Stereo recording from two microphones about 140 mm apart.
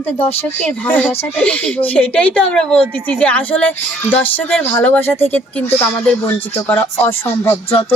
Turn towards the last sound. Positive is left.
turn(degrees=15)  # may be behind; listen again after turning